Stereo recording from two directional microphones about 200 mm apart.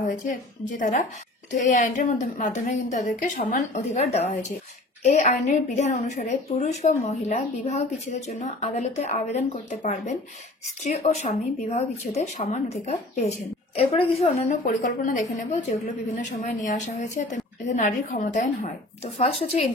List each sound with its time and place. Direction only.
0.7 s a woman's voice: 40° left (ahead or behind)
14.6 s a woman's voice: 40° left (ahead or behind)
19.1 s a woman's voice: 30° left (ahead or behind)